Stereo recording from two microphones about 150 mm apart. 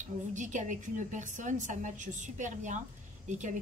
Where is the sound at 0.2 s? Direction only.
55° right (ahead or behind).